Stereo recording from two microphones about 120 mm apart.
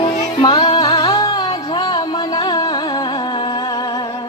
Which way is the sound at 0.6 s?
55° left (ahead or behind).